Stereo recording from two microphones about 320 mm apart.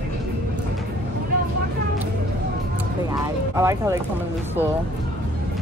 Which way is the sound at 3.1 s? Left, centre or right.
Centre.